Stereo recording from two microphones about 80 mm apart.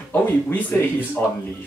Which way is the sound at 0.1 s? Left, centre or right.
Left.